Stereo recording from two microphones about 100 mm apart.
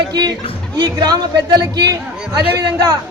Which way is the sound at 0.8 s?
45° right (ahead or behind).